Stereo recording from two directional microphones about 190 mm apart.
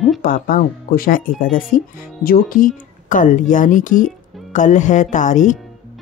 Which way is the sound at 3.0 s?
40° left (ahead or behind).